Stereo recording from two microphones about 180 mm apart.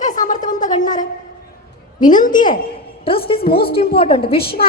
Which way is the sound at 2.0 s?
45° left (ahead or behind).